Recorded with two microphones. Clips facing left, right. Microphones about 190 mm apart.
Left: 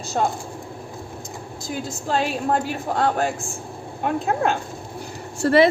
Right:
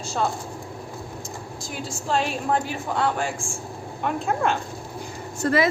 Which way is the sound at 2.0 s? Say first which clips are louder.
Left 2 dB; 40° left (ahead or behind).